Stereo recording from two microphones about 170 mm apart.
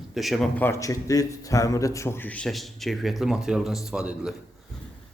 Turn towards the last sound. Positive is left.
turn(degrees=-5)  # may be behind; listen again after turning